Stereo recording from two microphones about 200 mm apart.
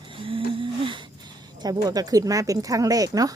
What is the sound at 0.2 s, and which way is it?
Livestock, 25° right (ahead or behind).